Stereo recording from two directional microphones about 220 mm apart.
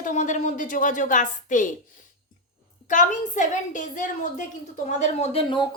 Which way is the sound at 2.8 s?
35° left (ahead or behind).